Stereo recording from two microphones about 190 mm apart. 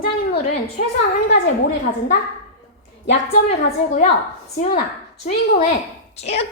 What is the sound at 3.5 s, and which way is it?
Speech, 35° left (ahead or behind).